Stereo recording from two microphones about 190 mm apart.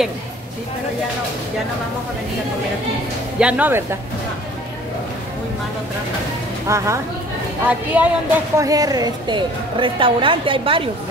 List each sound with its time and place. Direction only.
3.3 s a woman's voice: 5° right (ahead or behind)
6.7 s a woman's voice: 15° right (ahead or behind)
8.5 s a woman's voice: 20° right (ahead or behind)